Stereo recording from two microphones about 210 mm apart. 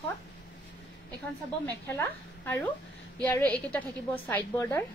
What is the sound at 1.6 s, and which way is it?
A woman's voice, 10° left (ahead or behind).